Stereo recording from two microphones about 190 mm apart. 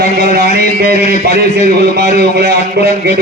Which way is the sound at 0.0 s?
55° right (ahead or behind).